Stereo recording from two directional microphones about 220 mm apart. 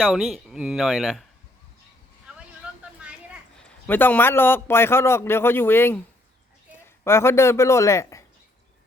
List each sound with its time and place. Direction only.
0.0 s speech: centre (ahead or behind)
2.3 s vehicle: 5° right (ahead or behind)
3.0 s a sound: 5° right (ahead or behind)
3.8 s speech: 10° left (ahead or behind)
7.0 s speech: 10° left (ahead or behind)